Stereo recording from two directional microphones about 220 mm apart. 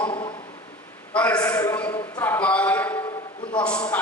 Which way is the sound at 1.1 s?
5° left (ahead or behind).